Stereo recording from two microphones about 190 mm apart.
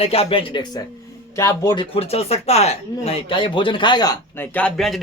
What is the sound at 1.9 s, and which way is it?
Speech, 30° left (ahead or behind).